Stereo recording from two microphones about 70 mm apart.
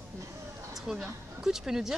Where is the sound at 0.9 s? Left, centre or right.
Centre.